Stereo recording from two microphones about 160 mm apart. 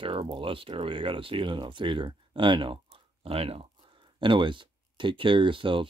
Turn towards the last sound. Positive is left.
turn(degrees=-30)  # may be behind; listen again after turning